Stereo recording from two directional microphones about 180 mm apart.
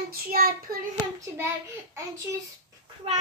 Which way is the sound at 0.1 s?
55° right (ahead or behind).